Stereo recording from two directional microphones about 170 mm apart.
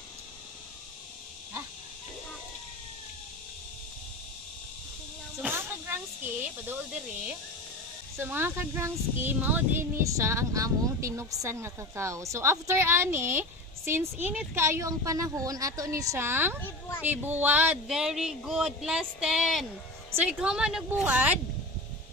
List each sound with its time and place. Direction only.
5.4 s hiss: 15° right (ahead or behind)
8.2 s speech: 15° right (ahead or behind)